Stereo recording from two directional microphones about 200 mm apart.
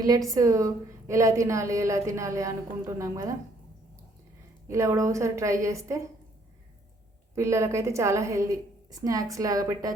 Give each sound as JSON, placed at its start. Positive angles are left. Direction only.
{"t": 0.3, "sound": "a woman's voice", "side_deg": -15}
{"t": 4.7, "sound": "a woman's voice", "side_deg": -15}
{"t": 7.3, "sound": "a woman's voice", "side_deg": -15}